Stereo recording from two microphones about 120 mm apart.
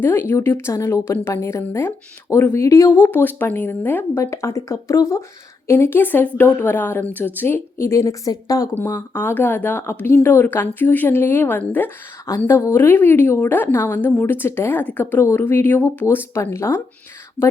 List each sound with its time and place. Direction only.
0.0 s speech: 20° left (ahead or behind)
9.0 s speech: 15° left (ahead or behind)